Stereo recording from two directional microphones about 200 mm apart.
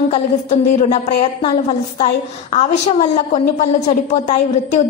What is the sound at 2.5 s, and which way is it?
A woman's voice, 30° left (ahead or behind).